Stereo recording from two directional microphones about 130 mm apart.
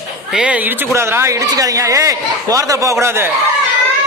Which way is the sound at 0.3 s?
10° right (ahead or behind).